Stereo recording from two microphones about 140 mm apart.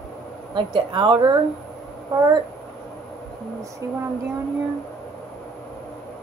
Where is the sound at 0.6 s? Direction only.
35° right (ahead or behind).